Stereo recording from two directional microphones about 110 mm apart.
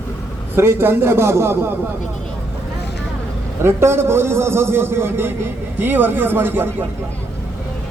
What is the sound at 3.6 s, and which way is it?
A man's voice, 25° right (ahead or behind).